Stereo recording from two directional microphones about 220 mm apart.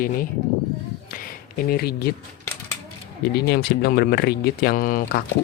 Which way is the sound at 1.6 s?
45° left (ahead or behind).